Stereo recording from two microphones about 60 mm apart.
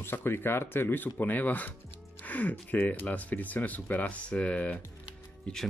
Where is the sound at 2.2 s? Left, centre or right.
Left.